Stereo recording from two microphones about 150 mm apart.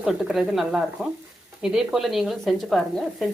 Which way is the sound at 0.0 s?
5° right (ahead or behind).